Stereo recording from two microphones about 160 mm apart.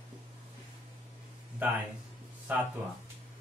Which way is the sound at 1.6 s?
10° right (ahead or behind).